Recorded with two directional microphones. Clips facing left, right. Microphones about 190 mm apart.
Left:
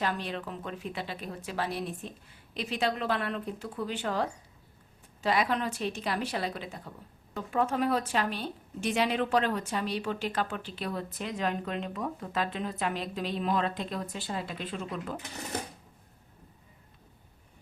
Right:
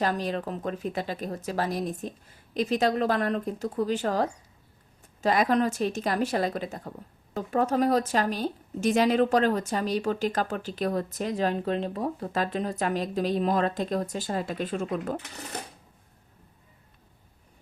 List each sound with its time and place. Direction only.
0.0 s a woman's voice: 40° right (ahead or behind)